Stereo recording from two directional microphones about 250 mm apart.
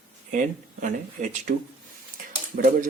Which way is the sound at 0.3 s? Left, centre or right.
Right.